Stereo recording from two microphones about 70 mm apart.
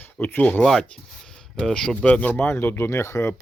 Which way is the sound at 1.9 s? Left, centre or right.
Centre.